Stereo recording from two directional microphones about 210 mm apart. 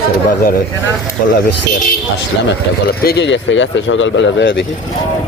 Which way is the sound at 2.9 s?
50° left (ahead or behind).